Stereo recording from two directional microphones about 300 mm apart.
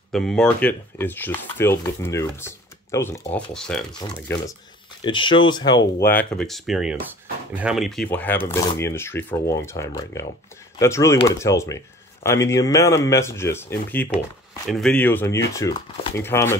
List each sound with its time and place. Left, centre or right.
0.1 s speech: centre